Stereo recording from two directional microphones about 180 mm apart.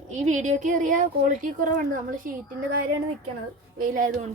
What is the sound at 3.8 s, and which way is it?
Speech, 50° right (ahead or behind).